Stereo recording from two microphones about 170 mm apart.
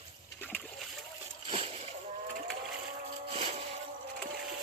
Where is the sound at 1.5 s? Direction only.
35° right (ahead or behind).